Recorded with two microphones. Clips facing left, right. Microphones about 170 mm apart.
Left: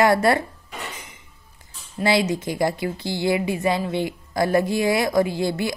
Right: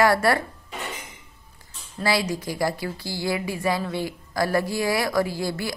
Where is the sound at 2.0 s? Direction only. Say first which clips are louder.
Left 4 dB; 20° left (ahead or behind).